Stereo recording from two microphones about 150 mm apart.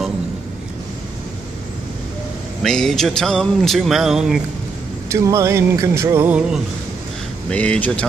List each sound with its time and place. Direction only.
2.6 s a sound: 5° left (ahead or behind)
5.1 s music: 20° right (ahead or behind)
7.5 s speech: 10° left (ahead or behind)